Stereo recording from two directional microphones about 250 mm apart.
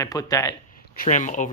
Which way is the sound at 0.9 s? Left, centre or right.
Left.